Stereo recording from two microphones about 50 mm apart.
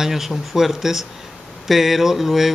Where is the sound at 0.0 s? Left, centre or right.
Centre.